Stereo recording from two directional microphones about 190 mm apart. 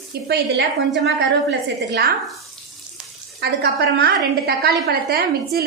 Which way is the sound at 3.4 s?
60° right (ahead or behind).